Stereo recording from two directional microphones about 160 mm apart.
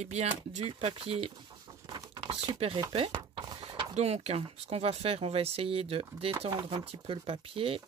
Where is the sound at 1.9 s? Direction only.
25° right (ahead or behind).